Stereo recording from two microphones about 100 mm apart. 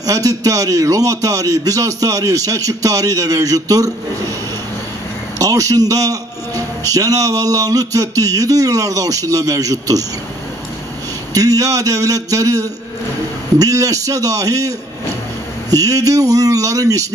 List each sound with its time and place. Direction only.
0.0 s a man's voice: 35° right (ahead or behind)
5.4 s a man's voice: 35° right (ahead or behind)
11.3 s a man's voice: 35° right (ahead or behind)
15.7 s a man's voice: 35° right (ahead or behind)